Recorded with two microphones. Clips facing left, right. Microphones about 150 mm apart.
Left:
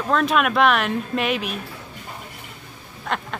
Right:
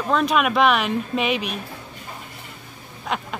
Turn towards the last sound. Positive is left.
turn(degrees=-5)  # may be behind; listen again after turning